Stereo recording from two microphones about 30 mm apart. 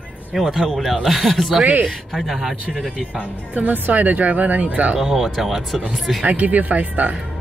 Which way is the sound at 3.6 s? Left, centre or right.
Right.